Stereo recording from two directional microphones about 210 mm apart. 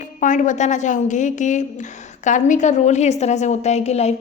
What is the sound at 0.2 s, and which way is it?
A woman's voice, 35° left (ahead or behind).